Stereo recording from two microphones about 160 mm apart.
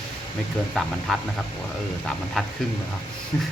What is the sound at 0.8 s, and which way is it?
Speech, centre (ahead or behind).